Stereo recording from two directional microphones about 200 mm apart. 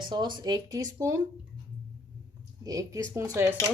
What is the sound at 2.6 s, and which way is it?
Speech, 15° right (ahead or behind).